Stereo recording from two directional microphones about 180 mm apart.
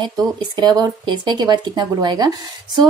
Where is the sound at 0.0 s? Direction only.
20° right (ahead or behind).